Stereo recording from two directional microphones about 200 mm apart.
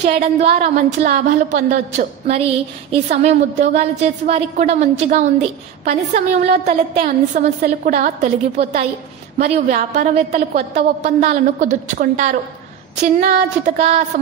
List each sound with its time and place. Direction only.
0.0 s a woman's voice: 35° right (ahead or behind)
6.6 s a woman's voice: 35° right (ahead or behind)